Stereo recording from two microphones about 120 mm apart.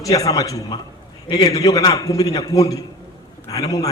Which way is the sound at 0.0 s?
30° left (ahead or behind).